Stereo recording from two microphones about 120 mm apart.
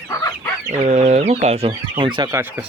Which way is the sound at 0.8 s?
70° right (ahead or behind).